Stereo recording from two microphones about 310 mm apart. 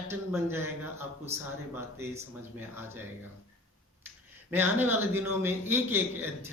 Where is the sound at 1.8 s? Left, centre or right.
Centre.